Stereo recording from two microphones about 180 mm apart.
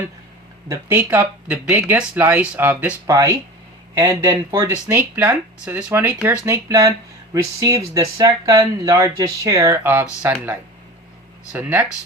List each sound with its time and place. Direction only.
0.7 s speech: 10° right (ahead or behind)